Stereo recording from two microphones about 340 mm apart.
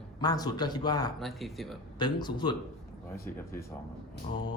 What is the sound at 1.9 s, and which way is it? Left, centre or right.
Speech, centre.